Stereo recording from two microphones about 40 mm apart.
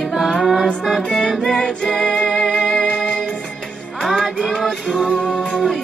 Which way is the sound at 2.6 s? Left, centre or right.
Centre.